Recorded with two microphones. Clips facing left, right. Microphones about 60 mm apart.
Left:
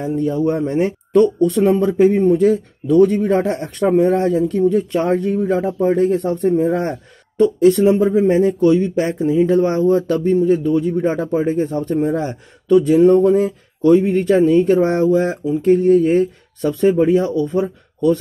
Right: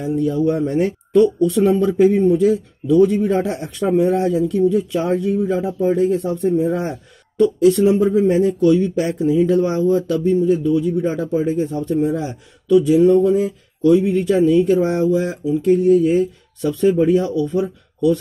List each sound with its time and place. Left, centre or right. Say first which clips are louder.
0.0 s speech: even; left
1.1 s speech: left 1 dB; left
2.2 s speech: left 1 dB; left
7.3 s speech: left 1 dB; left
16.6 s speech: left 1 dB; left